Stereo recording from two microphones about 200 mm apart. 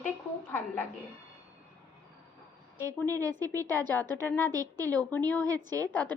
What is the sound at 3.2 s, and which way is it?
Speech, 20° right (ahead or behind).